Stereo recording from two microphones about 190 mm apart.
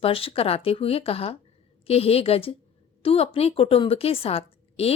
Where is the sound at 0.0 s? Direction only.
30° left (ahead or behind).